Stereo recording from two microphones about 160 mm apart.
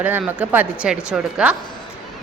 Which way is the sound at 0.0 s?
10° right (ahead or behind).